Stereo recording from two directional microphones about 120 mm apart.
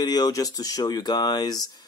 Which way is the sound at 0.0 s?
35° left (ahead or behind).